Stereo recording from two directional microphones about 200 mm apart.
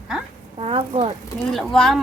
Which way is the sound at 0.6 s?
30° right (ahead or behind).